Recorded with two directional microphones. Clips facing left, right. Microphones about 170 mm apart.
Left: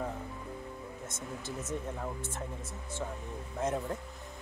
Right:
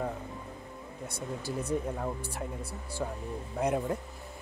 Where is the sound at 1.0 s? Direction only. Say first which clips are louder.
Right 8 dB; 20° left (ahead or behind).